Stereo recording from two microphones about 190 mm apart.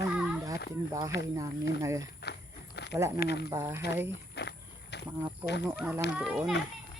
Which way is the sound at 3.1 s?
60° left (ahead or behind).